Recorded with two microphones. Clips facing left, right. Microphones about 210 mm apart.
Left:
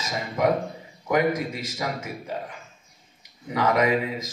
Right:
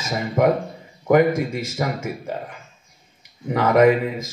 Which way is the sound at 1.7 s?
50° right (ahead or behind).